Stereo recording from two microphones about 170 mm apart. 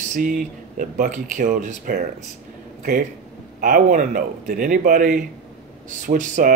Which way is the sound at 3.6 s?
50° right (ahead or behind).